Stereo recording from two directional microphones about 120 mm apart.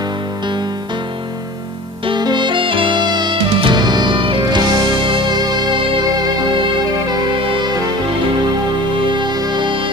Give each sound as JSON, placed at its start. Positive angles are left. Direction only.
{"t": 2.0, "sound": "music", "side_deg": -40}
{"t": 8.9, "sound": "music", "side_deg": -40}